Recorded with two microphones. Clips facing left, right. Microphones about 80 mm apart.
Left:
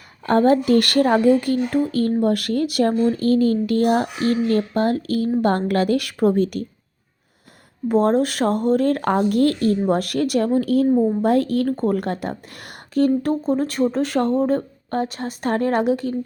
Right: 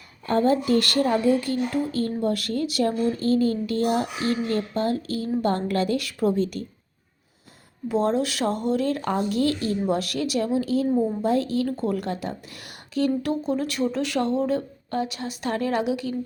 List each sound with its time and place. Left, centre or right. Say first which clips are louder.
0.3 s speech: left 5 dB; left
7.9 s speech: left 5 dB; left
13.2 s speech: left 5 dB; left